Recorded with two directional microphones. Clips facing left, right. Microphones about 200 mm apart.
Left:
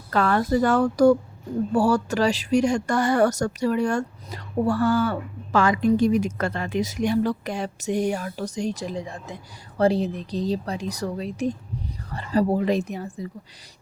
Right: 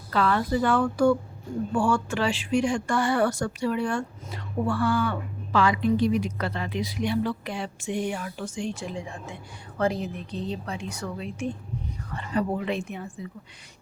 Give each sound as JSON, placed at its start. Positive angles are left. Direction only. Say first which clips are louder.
{"t": 0.1, "sound": "speech", "louder": "left 3 dB", "side_deg": 45}